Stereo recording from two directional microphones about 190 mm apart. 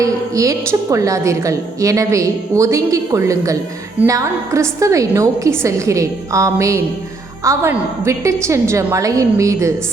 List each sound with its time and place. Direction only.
0.0 s a woman's voice: 15° right (ahead or behind)